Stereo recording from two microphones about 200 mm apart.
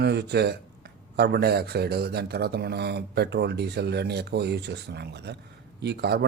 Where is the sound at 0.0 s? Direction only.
55° right (ahead or behind).